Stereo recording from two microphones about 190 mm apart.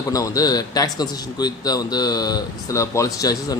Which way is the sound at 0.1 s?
20° left (ahead or behind).